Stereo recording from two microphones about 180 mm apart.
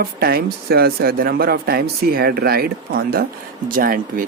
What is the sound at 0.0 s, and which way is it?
Speech, 60° right (ahead or behind).